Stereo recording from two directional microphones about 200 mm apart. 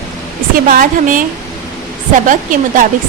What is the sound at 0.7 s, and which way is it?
Speech, 45° right (ahead or behind).